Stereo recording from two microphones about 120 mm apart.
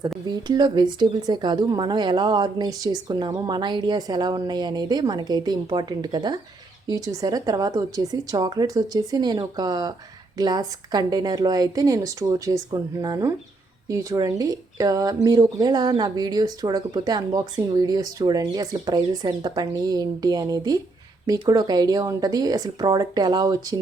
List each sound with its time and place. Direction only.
0.3 s speech: 35° right (ahead or behind)